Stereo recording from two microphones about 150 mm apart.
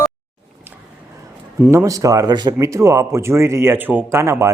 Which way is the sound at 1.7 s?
20° right (ahead or behind).